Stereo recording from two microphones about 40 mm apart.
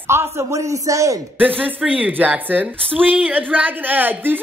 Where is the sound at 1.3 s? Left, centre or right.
Right.